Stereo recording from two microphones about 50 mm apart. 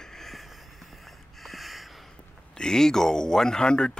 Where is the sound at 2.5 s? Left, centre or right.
Centre.